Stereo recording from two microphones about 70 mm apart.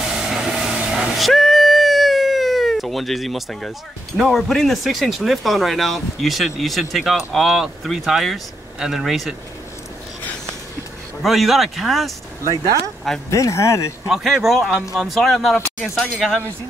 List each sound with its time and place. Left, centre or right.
0.0 s vehicle: centre
0.9 s cat: centre
4.2 s speech: centre
11.2 s speech: centre
12.4 s speech: right
13.3 s speech: left
14.0 s speech: centre